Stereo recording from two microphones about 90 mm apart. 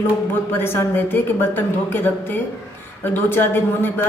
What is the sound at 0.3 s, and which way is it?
Speech, 25° left (ahead or behind).